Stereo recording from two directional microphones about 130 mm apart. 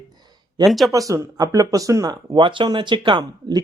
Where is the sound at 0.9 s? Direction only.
25° right (ahead or behind).